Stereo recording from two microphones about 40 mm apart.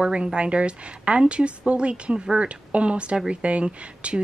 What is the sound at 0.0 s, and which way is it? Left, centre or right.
Speech, right.